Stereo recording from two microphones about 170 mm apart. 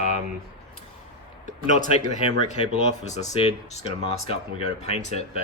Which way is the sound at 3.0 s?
40° left (ahead or behind).